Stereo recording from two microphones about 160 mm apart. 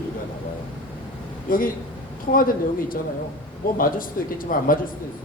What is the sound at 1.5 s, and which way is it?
Speech, 60° left (ahead or behind).